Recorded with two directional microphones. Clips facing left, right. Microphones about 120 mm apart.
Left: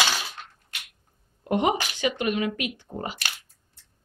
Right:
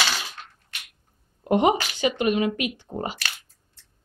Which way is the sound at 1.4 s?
25° right (ahead or behind).